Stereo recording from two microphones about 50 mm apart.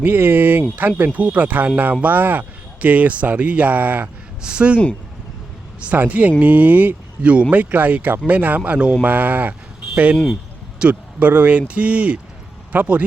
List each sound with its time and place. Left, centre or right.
0.0 s speech: right
4.4 s speech: right
5.9 s speech: right
10.8 s speech: right